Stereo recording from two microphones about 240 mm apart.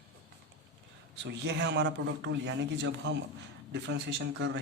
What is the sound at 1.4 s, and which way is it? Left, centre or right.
A man's voice, right.